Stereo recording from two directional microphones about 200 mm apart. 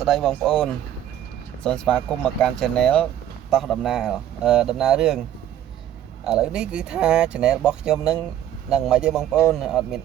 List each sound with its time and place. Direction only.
0.0 s speech: centre (ahead or behind)
6.2 s speech: 5° right (ahead or behind)